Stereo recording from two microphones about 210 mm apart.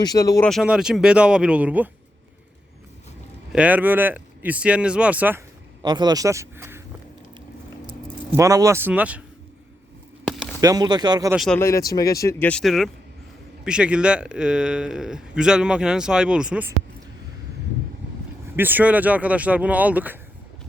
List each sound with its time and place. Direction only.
0.0 s speech: 15° left (ahead or behind)
0.4 s a man's voice: centre (ahead or behind)
3.5 s speech: 5° right (ahead or behind)
5.8 s speech: 20° right (ahead or behind)
8.4 s speech: 15° right (ahead or behind)
10.2 s a sound: centre (ahead or behind)
10.6 s speech: 15° right (ahead or behind)
11.3 s a man's voice: 5° left (ahead or behind)
18.5 s speech: 10° right (ahead or behind)